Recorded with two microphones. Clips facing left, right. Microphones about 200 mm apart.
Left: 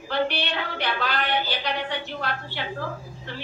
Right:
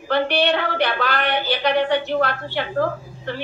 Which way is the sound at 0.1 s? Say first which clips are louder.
Right 7 dB; 65° right (ahead or behind).